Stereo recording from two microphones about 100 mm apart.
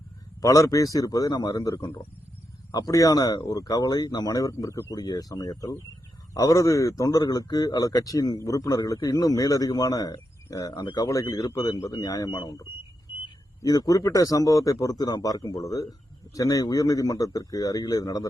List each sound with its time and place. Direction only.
0.4 s speech: 35° left (ahead or behind)
13.6 s speech: 35° left (ahead or behind)